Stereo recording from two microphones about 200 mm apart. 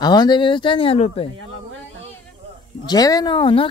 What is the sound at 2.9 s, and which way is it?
Speech, 20° left (ahead or behind).